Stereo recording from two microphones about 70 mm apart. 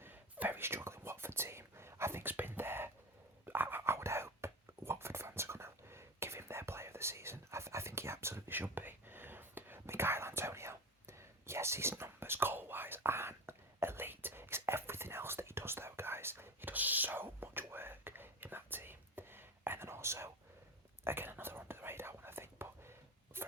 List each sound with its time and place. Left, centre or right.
0.0 s whispering: right